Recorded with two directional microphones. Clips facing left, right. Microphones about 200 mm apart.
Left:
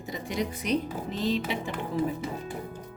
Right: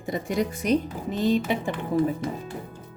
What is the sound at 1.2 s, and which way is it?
Speech, 50° right (ahead or behind).